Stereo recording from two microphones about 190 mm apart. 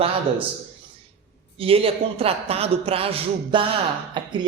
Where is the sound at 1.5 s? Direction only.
30° right (ahead or behind).